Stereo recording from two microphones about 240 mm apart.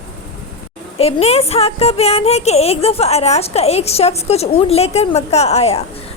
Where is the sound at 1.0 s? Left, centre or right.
Left.